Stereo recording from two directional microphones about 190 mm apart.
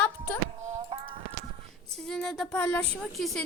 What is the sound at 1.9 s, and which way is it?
A woman's voice, 5° left (ahead or behind).